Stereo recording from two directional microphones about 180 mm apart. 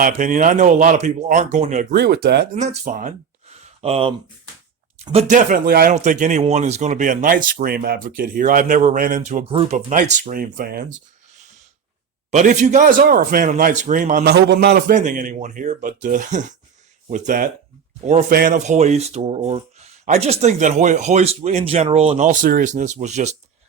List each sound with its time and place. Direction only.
0.0 s speech: 45° right (ahead or behind)
1.9 s speech: 65° right (ahead or behind)
2.6 s speech: 45° right (ahead or behind)
3.5 s a sound: 35° right (ahead or behind)
5.3 s speech: 45° right (ahead or behind)
6.0 s speech: 45° right (ahead or behind)
9.5 s speech: 30° right (ahead or behind)
9.7 s speech: 45° right (ahead or behind)
12.3 s speech: 40° right (ahead or behind)
14.3 s speech: 65° right (ahead or behind); by 23.4 s 40° right (ahead or behind)